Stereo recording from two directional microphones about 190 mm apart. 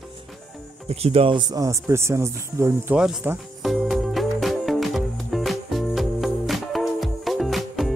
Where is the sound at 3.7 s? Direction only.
Centre (ahead or behind).